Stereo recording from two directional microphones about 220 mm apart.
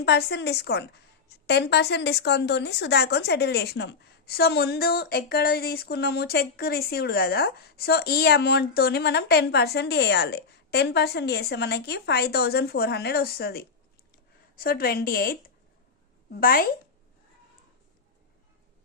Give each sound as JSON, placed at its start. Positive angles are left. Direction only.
{"t": 0.0, "sound": "a woman's voice", "side_deg": 50}